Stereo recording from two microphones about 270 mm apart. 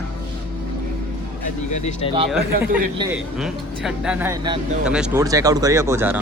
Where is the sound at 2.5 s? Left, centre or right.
Right.